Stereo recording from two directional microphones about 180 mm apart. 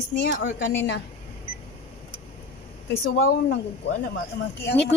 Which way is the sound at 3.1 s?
65° left (ahead or behind).